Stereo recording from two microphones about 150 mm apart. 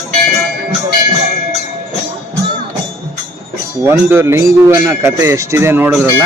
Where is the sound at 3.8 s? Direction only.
15° right (ahead or behind).